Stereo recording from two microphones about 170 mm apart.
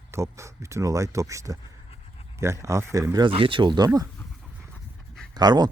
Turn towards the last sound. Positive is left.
turn(degrees=-25)  # may be behind; listen again after turning